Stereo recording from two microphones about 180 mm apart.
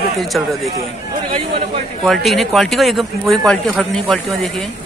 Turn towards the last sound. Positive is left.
turn(degrees=0)  # may be behind; listen again after turning